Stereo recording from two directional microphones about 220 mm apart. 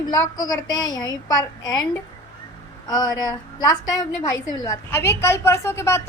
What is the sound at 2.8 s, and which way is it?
Speech, 15° left (ahead or behind).